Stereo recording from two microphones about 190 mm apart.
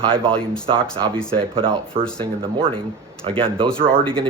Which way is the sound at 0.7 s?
25° right (ahead or behind).